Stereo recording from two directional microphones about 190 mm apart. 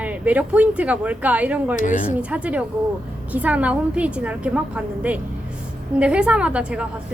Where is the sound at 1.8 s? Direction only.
40° left (ahead or behind).